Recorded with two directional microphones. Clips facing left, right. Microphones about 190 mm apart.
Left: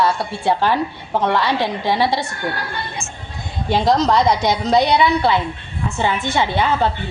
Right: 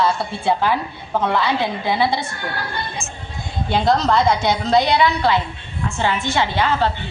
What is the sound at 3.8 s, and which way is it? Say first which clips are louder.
A woman's voice: left 1 dB; 15° left (ahead or behind).